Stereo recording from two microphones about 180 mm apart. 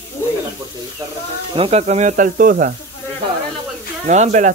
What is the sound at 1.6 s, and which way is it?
Speech, 35° right (ahead or behind).